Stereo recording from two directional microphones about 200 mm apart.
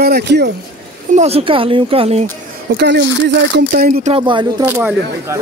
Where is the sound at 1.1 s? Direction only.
30° right (ahead or behind).